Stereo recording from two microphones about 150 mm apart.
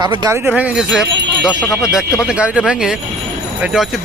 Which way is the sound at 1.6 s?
20° left (ahead or behind).